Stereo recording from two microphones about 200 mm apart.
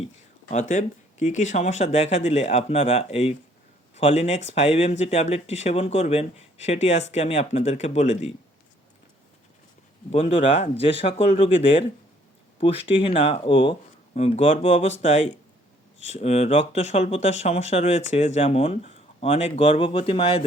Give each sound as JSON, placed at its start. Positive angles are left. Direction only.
{"t": 0.5, "sound": "speech", "side_deg": 40}
{"t": 10.1, "sound": "speech", "side_deg": 30}